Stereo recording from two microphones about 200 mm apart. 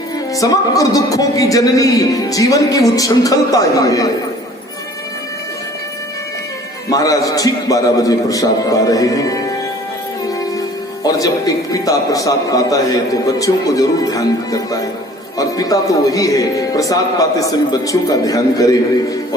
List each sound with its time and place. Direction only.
0.3 s a man's voice: 15° left (ahead or behind)
6.9 s a man's voice: 15° left (ahead or behind)
11.0 s a man's voice: 15° left (ahead or behind)